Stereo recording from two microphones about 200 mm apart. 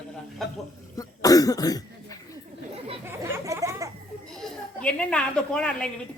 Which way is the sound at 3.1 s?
15° right (ahead or behind).